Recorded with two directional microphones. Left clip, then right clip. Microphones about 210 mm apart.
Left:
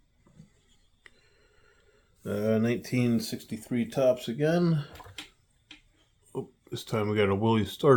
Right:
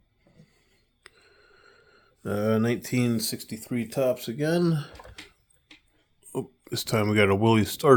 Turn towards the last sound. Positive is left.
turn(degrees=-45)  # may be behind; listen again after turning